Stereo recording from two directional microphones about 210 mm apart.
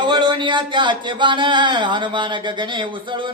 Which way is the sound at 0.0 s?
20° right (ahead or behind).